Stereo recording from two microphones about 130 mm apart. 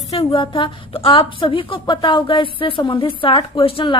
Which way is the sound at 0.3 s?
40° left (ahead or behind).